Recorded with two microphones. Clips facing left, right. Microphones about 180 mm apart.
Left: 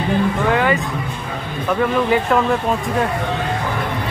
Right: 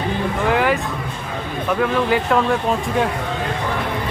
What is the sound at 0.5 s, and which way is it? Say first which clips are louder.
Music: right 1 dB; 5° right (ahead or behind).